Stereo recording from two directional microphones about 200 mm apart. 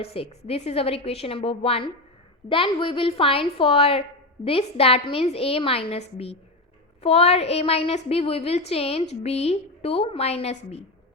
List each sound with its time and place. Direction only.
0.0 s a woman's voice: 30° left (ahead or behind)